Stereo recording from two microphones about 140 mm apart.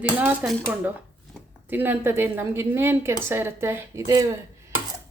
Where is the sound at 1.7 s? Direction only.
15° right (ahead or behind).